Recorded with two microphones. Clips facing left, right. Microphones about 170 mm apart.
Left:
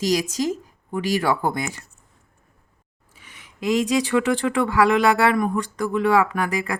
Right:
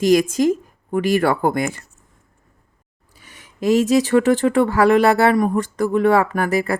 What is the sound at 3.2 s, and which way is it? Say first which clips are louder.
Speech: right 6 dB; 45° right (ahead or behind).